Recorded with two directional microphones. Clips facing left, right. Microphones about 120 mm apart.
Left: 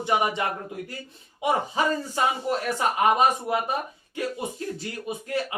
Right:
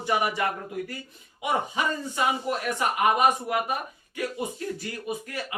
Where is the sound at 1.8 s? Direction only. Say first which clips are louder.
Left 3 dB; 35° left (ahead or behind).